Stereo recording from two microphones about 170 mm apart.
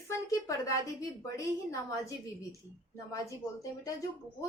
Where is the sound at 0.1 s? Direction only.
20° left (ahead or behind).